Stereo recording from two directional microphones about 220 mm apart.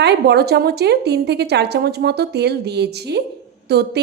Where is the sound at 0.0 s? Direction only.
50° right (ahead or behind).